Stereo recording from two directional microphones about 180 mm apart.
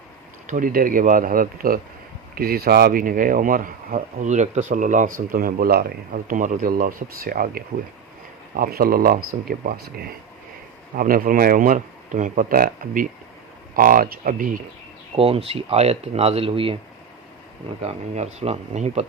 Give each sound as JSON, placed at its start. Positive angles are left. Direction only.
{"t": 0.4, "sound": "speech", "side_deg": -45}
{"t": 15.1, "sound": "speech", "side_deg": -30}
{"t": 17.8, "sound": "speech", "side_deg": -40}